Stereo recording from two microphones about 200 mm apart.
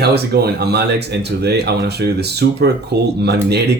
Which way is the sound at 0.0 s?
55° right (ahead or behind).